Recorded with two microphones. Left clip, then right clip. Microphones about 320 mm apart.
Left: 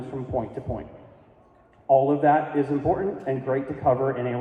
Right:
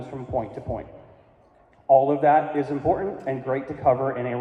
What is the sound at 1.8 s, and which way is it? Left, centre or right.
A man's voice, right.